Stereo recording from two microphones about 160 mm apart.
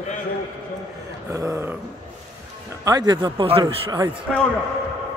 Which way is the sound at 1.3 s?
20° right (ahead or behind).